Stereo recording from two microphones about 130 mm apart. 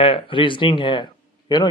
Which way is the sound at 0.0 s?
45° left (ahead or behind).